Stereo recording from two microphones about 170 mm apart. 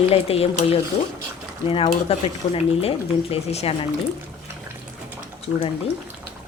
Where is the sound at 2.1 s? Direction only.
35° left (ahead or behind).